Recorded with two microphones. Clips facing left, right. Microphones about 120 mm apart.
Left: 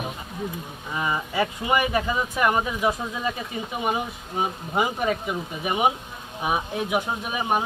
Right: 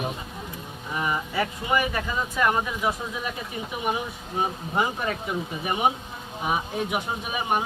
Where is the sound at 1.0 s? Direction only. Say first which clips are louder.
Left 2 dB; 20° left (ahead or behind).